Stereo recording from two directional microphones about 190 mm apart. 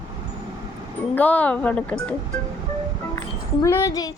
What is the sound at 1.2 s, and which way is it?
Speech, 10° left (ahead or behind).